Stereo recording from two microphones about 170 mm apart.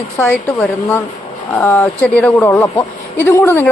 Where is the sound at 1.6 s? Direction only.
15° left (ahead or behind).